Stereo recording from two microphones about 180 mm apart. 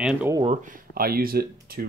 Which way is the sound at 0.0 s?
5° right (ahead or behind).